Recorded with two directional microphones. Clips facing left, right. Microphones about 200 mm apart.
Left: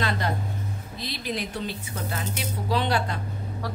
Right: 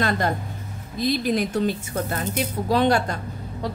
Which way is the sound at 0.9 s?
45° right (ahead or behind).